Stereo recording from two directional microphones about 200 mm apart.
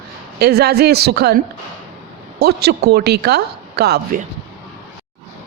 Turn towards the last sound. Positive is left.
turn(degrees=-55)  # may be behind; listen again after turning